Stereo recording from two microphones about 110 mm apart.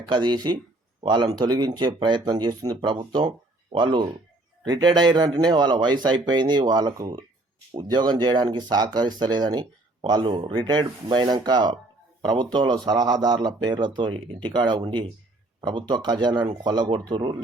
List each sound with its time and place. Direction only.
0.0 s speech: 45° right (ahead or behind)
7.7 s speech: 45° right (ahead or behind)